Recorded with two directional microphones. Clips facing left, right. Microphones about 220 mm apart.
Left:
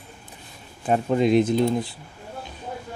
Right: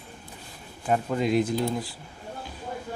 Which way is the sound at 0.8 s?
25° left (ahead or behind).